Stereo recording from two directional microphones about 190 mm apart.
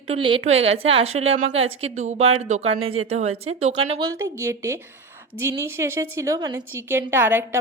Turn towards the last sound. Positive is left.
turn(degrees=-10)  # may be behind; listen again after turning